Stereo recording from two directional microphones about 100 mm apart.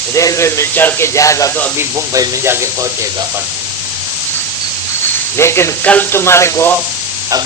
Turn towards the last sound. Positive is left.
turn(degrees=25)  # may be behind; listen again after turning